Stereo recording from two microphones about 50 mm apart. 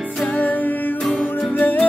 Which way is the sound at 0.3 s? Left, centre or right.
Left.